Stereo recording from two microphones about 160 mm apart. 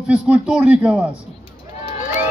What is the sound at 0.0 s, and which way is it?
Speech, 5° right (ahead or behind).